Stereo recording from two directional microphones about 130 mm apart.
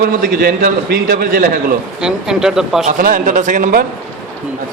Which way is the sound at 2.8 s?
90° right.